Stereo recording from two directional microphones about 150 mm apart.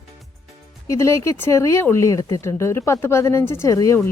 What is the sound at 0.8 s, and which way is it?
Speech, 20° left (ahead or behind).